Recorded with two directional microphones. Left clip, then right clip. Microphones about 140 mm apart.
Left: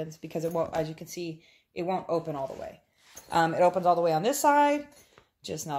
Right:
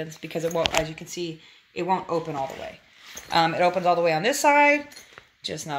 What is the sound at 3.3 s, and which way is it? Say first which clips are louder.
Speech: right 2 dB; 35° left (ahead or behind).